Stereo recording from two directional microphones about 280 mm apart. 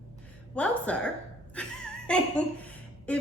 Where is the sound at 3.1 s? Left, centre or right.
Centre.